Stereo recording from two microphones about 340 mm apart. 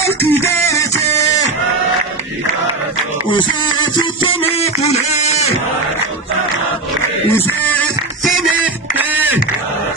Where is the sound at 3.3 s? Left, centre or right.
Centre.